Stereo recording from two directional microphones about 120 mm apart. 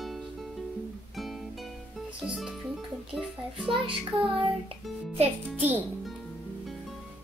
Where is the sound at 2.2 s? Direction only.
5° right (ahead or behind).